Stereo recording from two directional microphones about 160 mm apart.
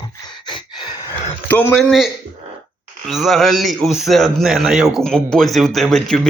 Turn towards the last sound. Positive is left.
turn(degrees=5)  # may be behind; listen again after turning